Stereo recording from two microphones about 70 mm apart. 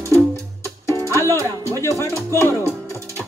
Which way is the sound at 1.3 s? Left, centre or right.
Right.